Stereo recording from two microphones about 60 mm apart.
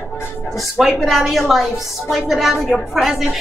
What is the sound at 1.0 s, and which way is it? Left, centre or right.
A woman's voice, centre.